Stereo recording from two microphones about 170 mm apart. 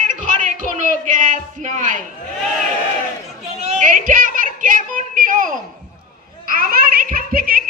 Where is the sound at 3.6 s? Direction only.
45° right (ahead or behind).